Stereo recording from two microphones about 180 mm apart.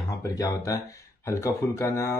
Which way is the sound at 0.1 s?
20° left (ahead or behind).